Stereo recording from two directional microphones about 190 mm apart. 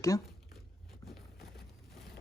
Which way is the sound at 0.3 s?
Centre (ahead or behind).